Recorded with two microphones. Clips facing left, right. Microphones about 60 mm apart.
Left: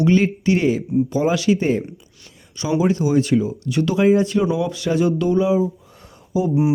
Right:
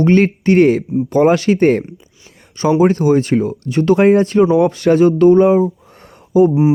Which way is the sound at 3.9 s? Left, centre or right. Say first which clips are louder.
Right 6 dB; right.